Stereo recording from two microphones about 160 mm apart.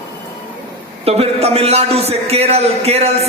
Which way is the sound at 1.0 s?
40° right (ahead or behind).